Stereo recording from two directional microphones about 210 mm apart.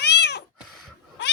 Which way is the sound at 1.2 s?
55° left (ahead or behind).